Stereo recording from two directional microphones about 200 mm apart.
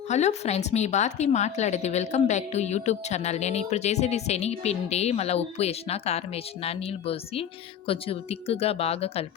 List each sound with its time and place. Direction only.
0.1 s a woman's voice: 35° left (ahead or behind)